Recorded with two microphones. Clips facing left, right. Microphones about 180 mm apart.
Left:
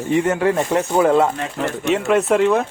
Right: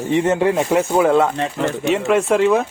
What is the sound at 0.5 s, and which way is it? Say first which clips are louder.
Speech: right 1 dB; 5° right (ahead or behind).